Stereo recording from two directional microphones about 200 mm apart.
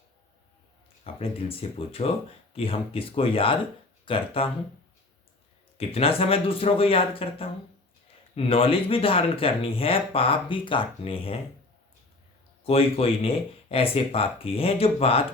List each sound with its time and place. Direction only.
1.0 s speech: 30° left (ahead or behind)
5.7 s speech: 30° left (ahead or behind)
12.6 s speech: 30° left (ahead or behind)